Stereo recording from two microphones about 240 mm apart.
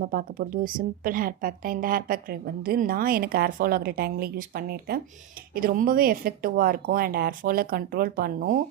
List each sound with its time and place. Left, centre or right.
0.0 s a woman's voice: right